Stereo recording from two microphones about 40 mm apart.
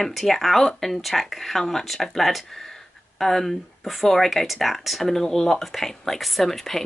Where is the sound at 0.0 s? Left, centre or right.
Centre.